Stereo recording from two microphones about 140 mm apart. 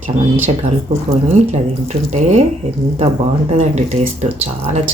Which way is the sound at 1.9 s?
55° right (ahead or behind).